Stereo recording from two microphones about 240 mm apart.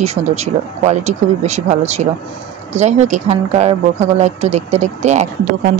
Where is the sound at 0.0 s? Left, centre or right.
Right.